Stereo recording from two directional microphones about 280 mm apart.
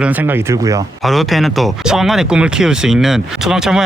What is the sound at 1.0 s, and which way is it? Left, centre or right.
Speech, centre.